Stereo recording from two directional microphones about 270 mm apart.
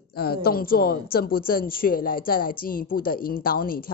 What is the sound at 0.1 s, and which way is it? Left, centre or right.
A woman's voice, left.